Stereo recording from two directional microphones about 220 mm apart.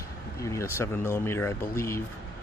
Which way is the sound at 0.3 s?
15° left (ahead or behind).